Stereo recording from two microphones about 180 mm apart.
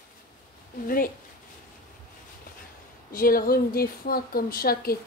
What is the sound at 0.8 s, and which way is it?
Speech, 50° left (ahead or behind).